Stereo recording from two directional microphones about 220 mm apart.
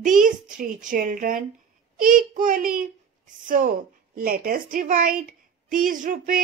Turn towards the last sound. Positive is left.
turn(degrees=-40)  # may be behind; listen again after turning